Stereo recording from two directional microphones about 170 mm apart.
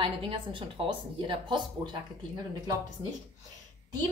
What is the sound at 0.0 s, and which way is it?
Speech, 30° right (ahead or behind).